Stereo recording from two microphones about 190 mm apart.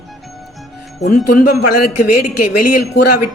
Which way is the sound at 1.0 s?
40° left (ahead or behind).